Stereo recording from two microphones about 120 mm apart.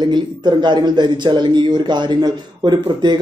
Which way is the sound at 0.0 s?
35° right (ahead or behind).